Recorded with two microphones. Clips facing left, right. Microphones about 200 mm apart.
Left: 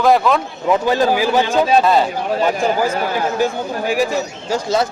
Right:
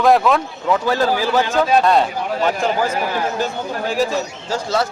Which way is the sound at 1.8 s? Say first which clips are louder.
Left 1 dB; centre (ahead or behind).